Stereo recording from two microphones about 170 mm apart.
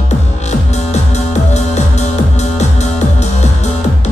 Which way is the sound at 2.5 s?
40° left (ahead or behind).